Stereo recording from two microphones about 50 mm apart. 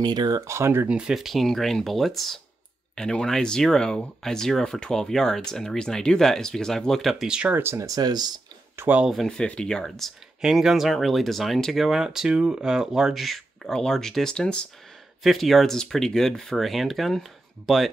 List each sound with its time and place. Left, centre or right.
0.5 s speech: right
0.8 s speech: right
1.1 s speech: centre
3.0 s speech: centre
7.5 s speech: right
9.3 s speech: left
9.8 s speech: centre
10.4 s speech: centre
13.1 s speech: centre
15.2 s speech: centre